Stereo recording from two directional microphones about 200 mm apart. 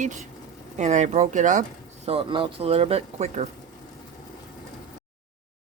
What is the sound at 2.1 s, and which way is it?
Speech, 25° right (ahead or behind).